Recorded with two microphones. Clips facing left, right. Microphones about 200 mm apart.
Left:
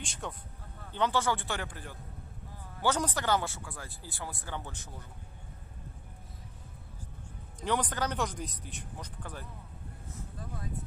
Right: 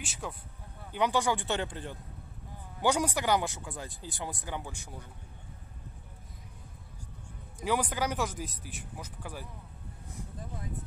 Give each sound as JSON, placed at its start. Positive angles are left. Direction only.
{"t": 0.0, "sound": "speech", "side_deg": -5}
{"t": 2.8, "sound": "speech", "side_deg": -10}
{"t": 7.6, "sound": "speech", "side_deg": -10}